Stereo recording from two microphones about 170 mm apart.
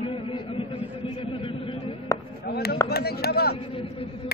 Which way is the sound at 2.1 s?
20° left (ahead or behind).